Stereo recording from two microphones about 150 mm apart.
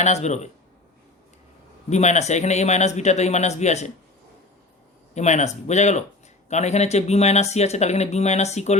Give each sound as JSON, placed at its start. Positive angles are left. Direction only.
{"t": 0.0, "sound": "speech", "side_deg": 50}
{"t": 1.9, "sound": "speech", "side_deg": 50}
{"t": 5.1, "sound": "speech", "side_deg": 50}